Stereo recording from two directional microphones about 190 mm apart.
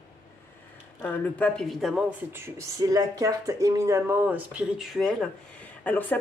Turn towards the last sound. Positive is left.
turn(degrees=10)  # may be behind; listen again after turning